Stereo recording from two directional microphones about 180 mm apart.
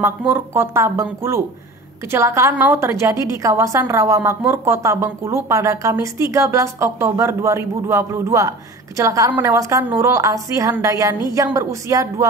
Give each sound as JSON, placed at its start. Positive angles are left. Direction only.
{"t": 0.0, "sound": "speech", "side_deg": -15}